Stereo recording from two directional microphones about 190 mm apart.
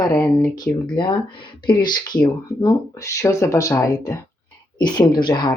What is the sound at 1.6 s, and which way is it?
Speech, 25° left (ahead or behind).